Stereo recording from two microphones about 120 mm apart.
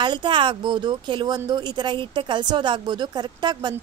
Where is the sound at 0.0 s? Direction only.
40° right (ahead or behind).